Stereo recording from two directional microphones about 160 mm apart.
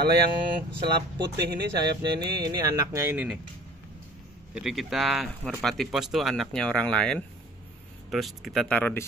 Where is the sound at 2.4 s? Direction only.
20° right (ahead or behind).